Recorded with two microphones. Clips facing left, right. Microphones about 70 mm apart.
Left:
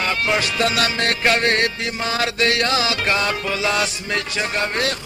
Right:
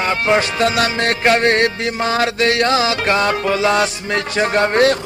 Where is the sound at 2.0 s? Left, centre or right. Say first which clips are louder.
Right 5 dB; right.